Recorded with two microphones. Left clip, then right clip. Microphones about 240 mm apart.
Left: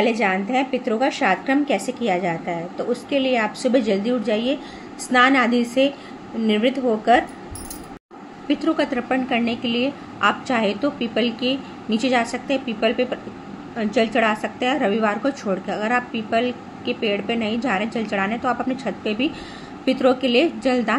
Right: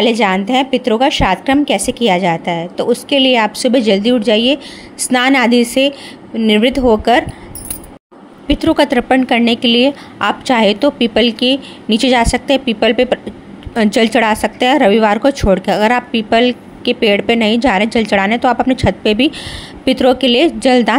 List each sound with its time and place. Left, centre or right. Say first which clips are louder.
0.0 s speech: right 7 dB; right
8.5 s speech: right 9 dB; right